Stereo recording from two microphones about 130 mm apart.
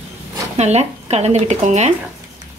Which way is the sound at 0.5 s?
60° right (ahead or behind).